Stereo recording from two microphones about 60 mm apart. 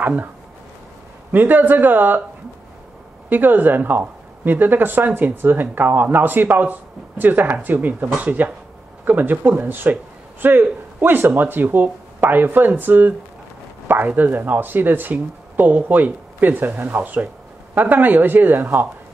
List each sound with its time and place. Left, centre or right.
0.0 s speech: right
1.3 s speech: right
3.3 s speech: right
17.0 s speech: right